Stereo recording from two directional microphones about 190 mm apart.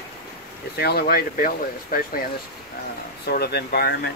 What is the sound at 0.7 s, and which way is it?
Speech, 55° left (ahead or behind).